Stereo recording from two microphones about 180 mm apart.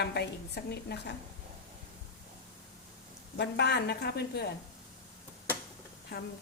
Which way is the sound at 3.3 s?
70° left (ahead or behind).